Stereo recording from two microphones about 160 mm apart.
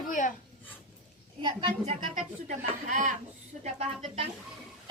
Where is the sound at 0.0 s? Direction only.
55° left (ahead or behind).